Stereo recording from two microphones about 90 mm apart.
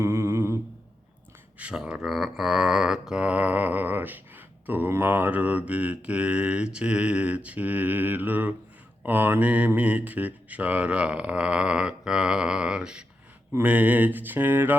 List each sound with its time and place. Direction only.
0.0 s humming: 30° right (ahead or behind)
1.5 s speech: 15° right (ahead or behind)
1.8 s mantra: 5° right (ahead or behind); by 14.8 s 20° right (ahead or behind)